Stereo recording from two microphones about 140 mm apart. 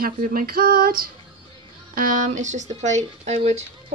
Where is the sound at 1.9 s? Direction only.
80° right.